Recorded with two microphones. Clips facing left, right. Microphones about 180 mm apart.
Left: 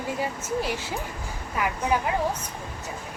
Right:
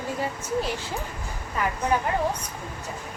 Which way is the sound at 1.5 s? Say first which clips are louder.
Even; 5° left (ahead or behind).